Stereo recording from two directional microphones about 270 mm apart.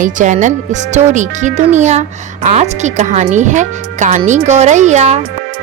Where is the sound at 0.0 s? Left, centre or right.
Right.